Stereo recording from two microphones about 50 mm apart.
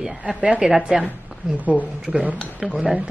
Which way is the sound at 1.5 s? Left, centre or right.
Right.